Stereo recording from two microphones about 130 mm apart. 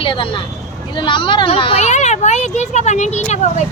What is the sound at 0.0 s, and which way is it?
A child's voice, 40° left (ahead or behind).